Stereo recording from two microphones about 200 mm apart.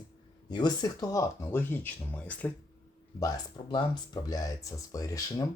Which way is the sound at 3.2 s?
20° left (ahead or behind).